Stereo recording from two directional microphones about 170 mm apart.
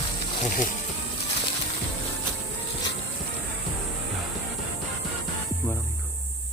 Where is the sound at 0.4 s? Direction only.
50° left (ahead or behind).